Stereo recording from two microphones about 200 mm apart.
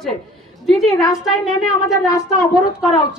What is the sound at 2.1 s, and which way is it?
Speech, 15° left (ahead or behind).